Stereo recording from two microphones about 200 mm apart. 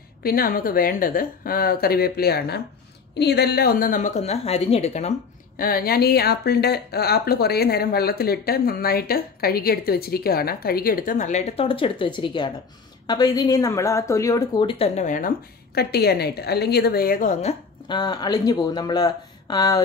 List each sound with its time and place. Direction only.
0.2 s speech: 45° left (ahead or behind); by 5.1 s 30° left (ahead or behind)
5.6 s a woman's voice: 50° left (ahead or behind); by 19.8 s 20° left (ahead or behind)